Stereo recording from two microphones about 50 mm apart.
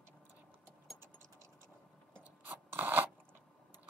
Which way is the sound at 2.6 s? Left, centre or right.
Right.